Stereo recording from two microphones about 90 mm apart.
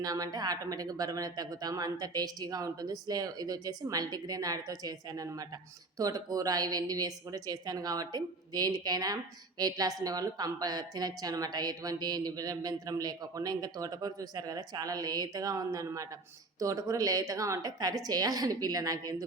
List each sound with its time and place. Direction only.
0.0 s a woman's voice: 45° right (ahead or behind)